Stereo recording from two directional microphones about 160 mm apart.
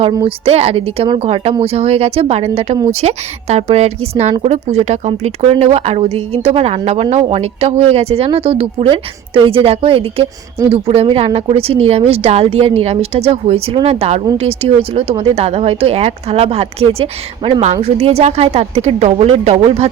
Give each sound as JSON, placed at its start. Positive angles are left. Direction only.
{"t": 0.0, "sound": "a woman's voice", "side_deg": -30}